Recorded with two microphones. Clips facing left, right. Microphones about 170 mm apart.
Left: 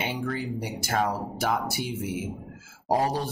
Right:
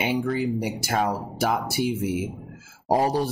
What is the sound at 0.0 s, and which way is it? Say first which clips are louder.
Speech: right 6 dB; 10° right (ahead or behind).